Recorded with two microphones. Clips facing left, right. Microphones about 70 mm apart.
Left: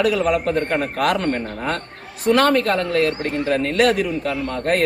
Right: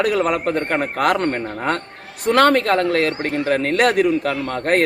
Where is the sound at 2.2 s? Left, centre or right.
Right.